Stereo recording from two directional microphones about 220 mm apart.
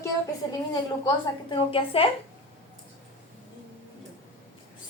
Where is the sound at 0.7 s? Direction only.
20° left (ahead or behind).